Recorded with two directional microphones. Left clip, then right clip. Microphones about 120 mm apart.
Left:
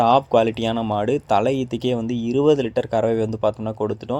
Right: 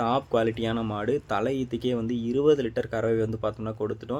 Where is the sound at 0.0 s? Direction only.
45° left (ahead or behind).